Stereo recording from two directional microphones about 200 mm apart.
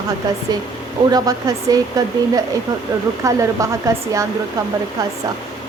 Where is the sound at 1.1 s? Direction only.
20° right (ahead or behind).